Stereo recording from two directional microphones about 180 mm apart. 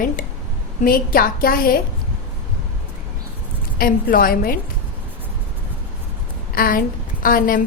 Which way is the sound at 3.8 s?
55° left (ahead or behind).